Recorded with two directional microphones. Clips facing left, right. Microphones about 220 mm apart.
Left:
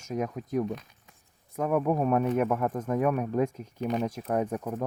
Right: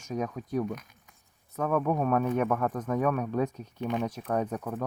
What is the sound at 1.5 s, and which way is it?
Speech, 10° left (ahead or behind).